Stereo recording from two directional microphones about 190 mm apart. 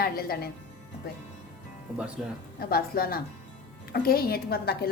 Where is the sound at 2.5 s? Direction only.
50° left (ahead or behind).